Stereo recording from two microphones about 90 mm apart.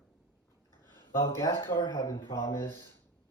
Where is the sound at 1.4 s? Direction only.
45° left (ahead or behind).